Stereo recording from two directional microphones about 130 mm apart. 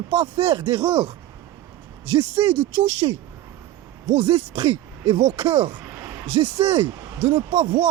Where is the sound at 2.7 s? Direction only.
60° right (ahead or behind).